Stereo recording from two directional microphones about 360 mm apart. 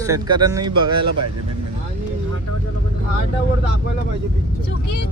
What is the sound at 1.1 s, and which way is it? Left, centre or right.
Speech, right.